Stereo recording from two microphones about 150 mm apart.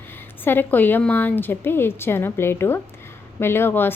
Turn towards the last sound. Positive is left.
turn(degrees=15)  # may be behind; listen again after turning